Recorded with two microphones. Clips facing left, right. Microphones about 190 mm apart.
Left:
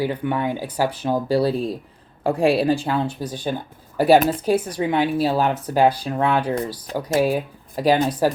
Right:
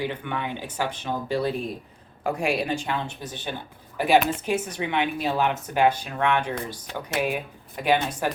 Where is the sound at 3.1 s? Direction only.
10° left (ahead or behind).